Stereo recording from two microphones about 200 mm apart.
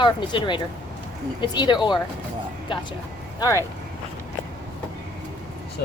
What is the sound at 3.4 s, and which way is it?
Speech, 15° left (ahead or behind).